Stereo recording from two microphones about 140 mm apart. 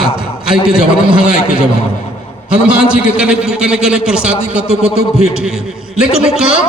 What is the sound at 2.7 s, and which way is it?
A man's voice, 5° right (ahead or behind).